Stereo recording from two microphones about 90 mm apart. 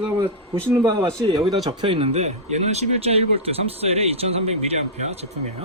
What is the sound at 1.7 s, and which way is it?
Speech, 80° right.